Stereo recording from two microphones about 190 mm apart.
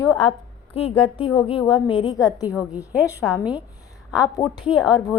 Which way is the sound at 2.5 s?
5° right (ahead or behind).